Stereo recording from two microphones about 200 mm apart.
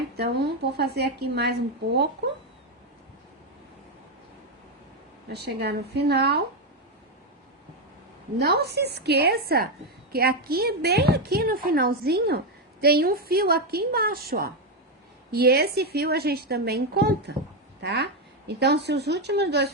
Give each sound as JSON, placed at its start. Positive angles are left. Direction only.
{"t": 0.8, "sound": "speech", "side_deg": -55}
{"t": 5.3, "sound": "a woman's voice", "side_deg": -55}
{"t": 8.4, "sound": "a woman's voice", "side_deg": -55}